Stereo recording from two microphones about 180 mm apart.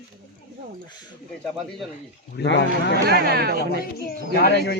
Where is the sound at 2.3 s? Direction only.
70° left (ahead or behind).